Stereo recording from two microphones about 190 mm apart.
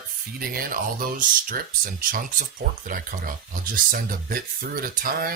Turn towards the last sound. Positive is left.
turn(degrees=-45)  # may be behind; listen again after turning